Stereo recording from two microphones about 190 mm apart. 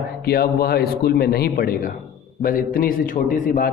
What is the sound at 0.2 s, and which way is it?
A man's voice, 55° left (ahead or behind).